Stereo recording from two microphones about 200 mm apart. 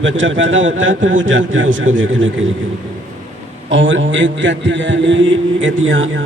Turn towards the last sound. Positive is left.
turn(degrees=-70)  # may be behind; listen again after turning